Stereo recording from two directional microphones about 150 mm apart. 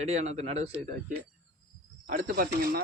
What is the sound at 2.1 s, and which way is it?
Speech, 70° right (ahead or behind).